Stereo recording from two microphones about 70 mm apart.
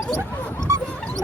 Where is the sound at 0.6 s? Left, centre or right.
Right.